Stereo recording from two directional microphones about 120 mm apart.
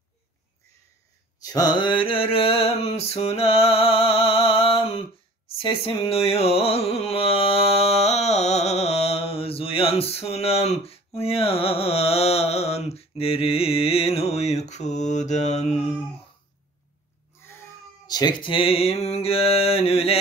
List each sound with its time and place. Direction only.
1.4 s mantra: 35° left (ahead or behind); by 5.0 s 50° left (ahead or behind)
5.6 s speech: 40° left (ahead or behind)
6.0 s music: 55° left (ahead or behind); by 15.7 s 70° left (ahead or behind)
17.4 s cat: 20° left (ahead or behind)
18.0 s music: 35° left (ahead or behind); by 20.2 s 55° left (ahead or behind)